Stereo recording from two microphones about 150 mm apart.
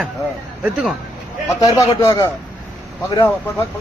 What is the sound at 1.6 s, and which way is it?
Speech, 20° left (ahead or behind).